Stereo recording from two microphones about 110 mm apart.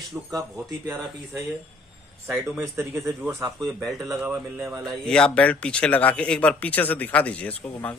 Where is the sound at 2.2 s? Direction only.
20° right (ahead or behind).